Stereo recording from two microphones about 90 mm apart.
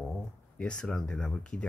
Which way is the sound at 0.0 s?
10° left (ahead or behind).